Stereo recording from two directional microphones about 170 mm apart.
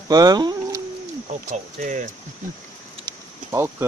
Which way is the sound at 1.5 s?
50° right (ahead or behind).